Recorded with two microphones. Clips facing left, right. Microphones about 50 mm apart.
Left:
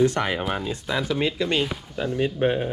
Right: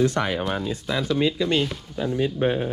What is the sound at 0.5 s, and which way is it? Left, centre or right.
Speech, left.